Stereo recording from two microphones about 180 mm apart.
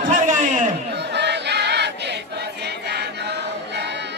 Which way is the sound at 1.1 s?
70° right (ahead or behind).